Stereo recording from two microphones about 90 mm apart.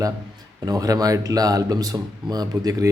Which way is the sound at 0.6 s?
45° right (ahead or behind).